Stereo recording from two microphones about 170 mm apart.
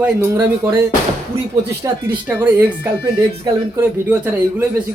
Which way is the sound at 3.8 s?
10° right (ahead or behind).